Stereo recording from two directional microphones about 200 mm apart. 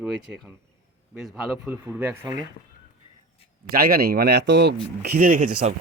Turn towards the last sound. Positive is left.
turn(degrees=-40)  # may be behind; listen again after turning